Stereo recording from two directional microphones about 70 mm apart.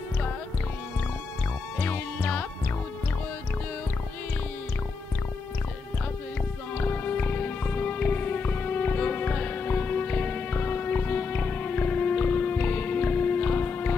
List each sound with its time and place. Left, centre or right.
1.8 s music: left
6.8 s music: left